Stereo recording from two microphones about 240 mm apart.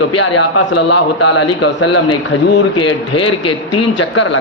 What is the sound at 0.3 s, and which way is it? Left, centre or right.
A man's voice, left.